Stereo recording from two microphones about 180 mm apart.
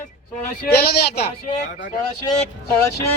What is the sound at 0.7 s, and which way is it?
Speech, 60° left (ahead or behind).